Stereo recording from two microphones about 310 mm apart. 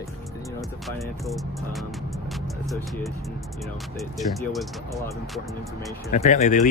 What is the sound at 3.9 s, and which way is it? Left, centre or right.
Speech, centre.